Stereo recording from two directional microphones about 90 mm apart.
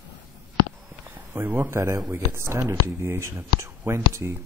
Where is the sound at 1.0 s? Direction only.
25° right (ahead or behind).